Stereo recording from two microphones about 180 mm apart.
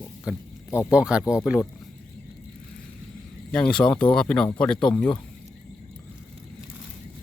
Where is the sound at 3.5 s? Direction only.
5° left (ahead or behind).